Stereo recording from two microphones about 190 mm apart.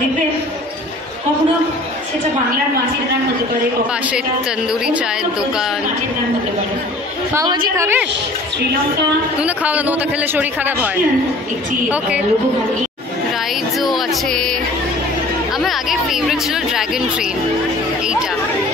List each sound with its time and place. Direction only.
7.3 s a man's voice: 20° right (ahead or behind)
9.4 s a man's voice: 10° right (ahead or behind)
13.7 s speech: centre (ahead or behind)
15.6 s speech: centre (ahead or behind)